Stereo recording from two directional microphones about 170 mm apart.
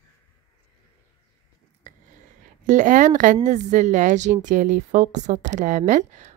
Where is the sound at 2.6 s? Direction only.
45° right (ahead or behind).